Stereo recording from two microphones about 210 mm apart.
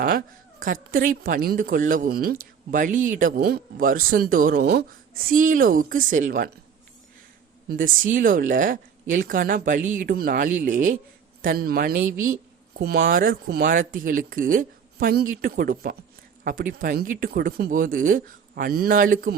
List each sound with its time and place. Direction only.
0.6 s a woman's voice: 40° right (ahead or behind)
7.7 s a woman's voice: 40° right (ahead or behind)